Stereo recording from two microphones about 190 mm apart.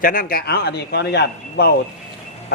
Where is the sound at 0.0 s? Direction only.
50° left (ahead or behind).